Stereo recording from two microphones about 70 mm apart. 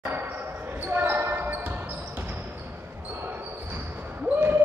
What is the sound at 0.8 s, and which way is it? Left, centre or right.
Basketball bounce, right.